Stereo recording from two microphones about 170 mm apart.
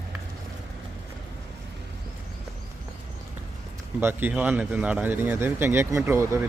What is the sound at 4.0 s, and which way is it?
A man's voice, 10° right (ahead or behind).